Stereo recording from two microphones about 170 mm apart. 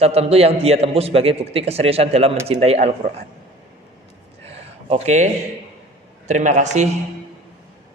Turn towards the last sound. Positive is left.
turn(degrees=-45)  # may be behind; listen again after turning